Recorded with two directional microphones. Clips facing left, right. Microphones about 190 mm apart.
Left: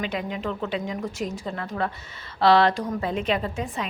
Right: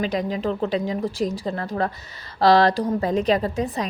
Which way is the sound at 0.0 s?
35° right (ahead or behind).